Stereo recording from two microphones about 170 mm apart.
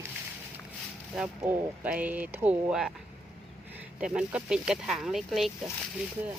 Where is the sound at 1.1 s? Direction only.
5° right (ahead or behind).